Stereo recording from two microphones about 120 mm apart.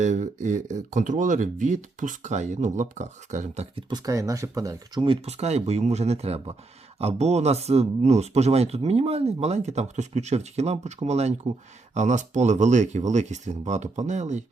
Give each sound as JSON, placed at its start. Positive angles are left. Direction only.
{"t": 0.0, "sound": "speech", "side_deg": -85}
{"t": 3.8, "sound": "speech", "side_deg": -30}
{"t": 5.0, "sound": "speech", "side_deg": -55}
{"t": 11.9, "sound": "speech", "side_deg": -80}